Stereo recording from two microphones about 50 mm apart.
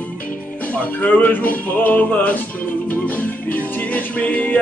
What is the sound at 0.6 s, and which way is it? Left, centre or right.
Music, left.